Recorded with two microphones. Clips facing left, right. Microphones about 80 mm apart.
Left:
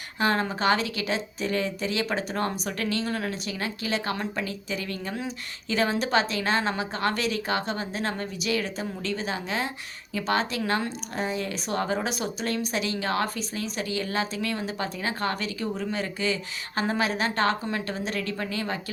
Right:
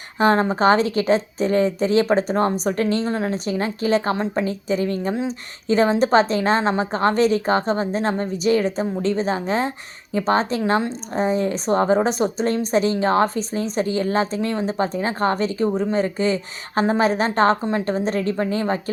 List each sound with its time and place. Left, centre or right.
0.2 s a woman's voice: right